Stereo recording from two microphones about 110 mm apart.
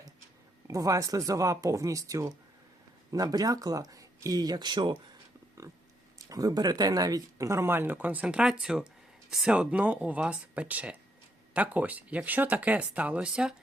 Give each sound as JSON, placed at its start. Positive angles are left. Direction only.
{"t": 0.7, "sound": "speech", "side_deg": -30}
{"t": 6.1, "sound": "speech", "side_deg": -30}